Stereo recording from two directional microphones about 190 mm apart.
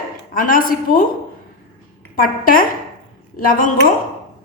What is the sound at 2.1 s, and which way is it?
A woman's voice, 50° left (ahead or behind).